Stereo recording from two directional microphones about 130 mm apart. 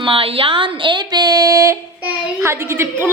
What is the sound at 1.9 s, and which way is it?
A child's voice, 10° right (ahead or behind).